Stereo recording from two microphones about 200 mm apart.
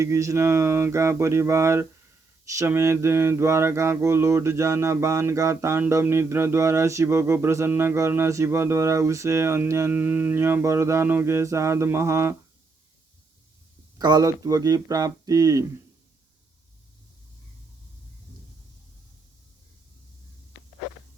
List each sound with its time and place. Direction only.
0.0 s mantra: 15° right (ahead or behind)
14.0 s speech: 20° right (ahead or behind)